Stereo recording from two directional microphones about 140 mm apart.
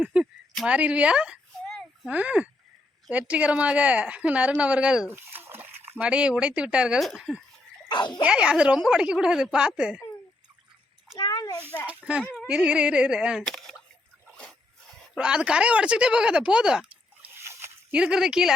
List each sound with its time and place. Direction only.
0.0 s a woman's voice: 5° right (ahead or behind)
5.4 s a sound: 15° right (ahead or behind)
6.0 s a woman's voice: 10° right (ahead or behind)
7.9 s speech: 35° left (ahead or behind)
8.2 s a woman's voice: 5° right (ahead or behind)
11.2 s a sound: 30° left (ahead or behind)
11.9 s a woman's voice: 10° right (ahead or behind)
12.2 s speech: 10° left (ahead or behind)
12.5 s a woman's voice: 5° right (ahead or behind)
15.1 s a woman's voice: 5° right (ahead or behind)
17.2 s a sound: 20° right (ahead or behind)
17.9 s speech: 5° right (ahead or behind)